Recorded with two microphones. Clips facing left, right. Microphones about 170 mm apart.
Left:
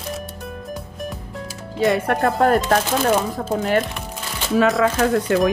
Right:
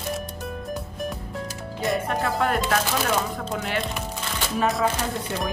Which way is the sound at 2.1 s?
50° left (ahead or behind).